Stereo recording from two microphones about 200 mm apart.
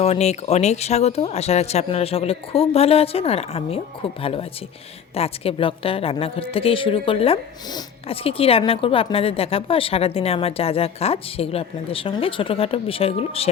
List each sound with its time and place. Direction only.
0.0 s a woman's voice: 30° left (ahead or behind)